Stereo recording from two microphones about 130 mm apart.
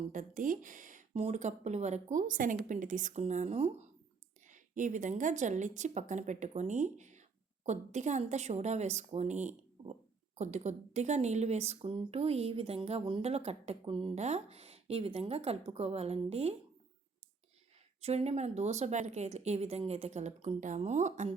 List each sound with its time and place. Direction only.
0.1 s speech: 80° right
2.6 s speech: 80° right; by 3.8 s 55° right (ahead or behind)
4.4 s a woman's voice: 75° right (ahead or behind); by 16.6 s 55° right (ahead or behind)
18.0 s speech: 55° right (ahead or behind)